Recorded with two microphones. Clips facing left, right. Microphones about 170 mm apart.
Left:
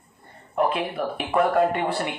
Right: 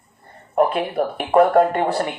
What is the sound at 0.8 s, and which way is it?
Speech, 55° right (ahead or behind).